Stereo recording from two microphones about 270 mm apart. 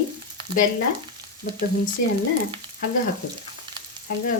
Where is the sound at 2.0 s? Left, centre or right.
Left.